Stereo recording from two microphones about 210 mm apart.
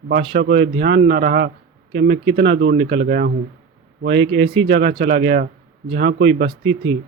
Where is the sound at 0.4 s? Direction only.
60° right (ahead or behind).